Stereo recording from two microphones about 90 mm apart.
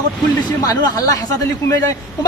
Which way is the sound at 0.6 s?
45° left (ahead or behind).